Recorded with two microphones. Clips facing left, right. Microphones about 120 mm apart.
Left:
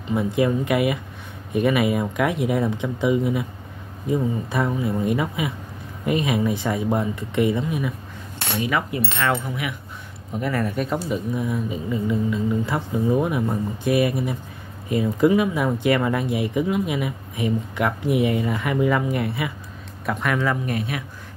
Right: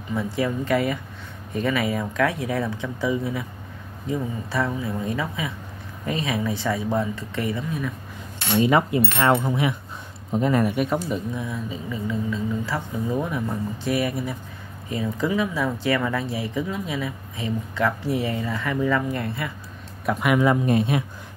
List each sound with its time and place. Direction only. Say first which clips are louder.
0.1 s speech: left 4 dB; 15° left (ahead or behind)
8.6 s speech: right 4 dB; 30° right (ahead or behind); by 10.9 s 15° right (ahead or behind)
10.9 s speech: left 1 dB; centre (ahead or behind)
11.5 s speech: left 5 dB; 20° left (ahead or behind)
20.1 s speech: right 3 dB; 10° right (ahead or behind)
20.6 s speech: right 6 dB; 25° right (ahead or behind)